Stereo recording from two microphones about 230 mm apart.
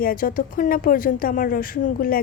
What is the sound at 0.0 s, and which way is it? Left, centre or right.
Speech, left.